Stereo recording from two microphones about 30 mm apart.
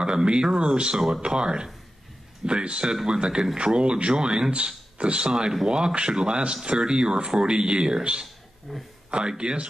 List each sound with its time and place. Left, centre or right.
0.0 s speech: right
4.5 s speech: right
8.7 s speech: centre
9.4 s speech: right